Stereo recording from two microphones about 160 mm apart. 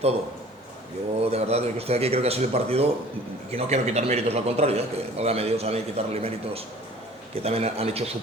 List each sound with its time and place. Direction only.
1.2 s a man's voice: 40° right (ahead or behind)